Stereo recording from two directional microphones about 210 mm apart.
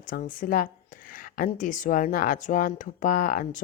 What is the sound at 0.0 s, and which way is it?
Speech, 40° left (ahead or behind).